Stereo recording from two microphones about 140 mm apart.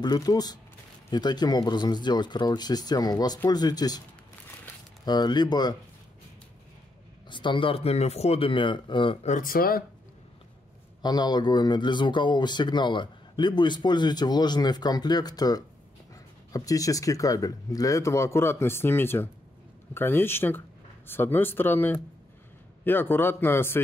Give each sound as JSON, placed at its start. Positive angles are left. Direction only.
{"t": 0.0, "sound": "speech", "side_deg": 30}
{"t": 5.0, "sound": "a man's voice", "side_deg": 30}
{"t": 7.2, "sound": "a man's voice", "side_deg": 35}
{"t": 9.4, "sound": "speech", "side_deg": 90}
{"t": 11.0, "sound": "a man's voice", "side_deg": 30}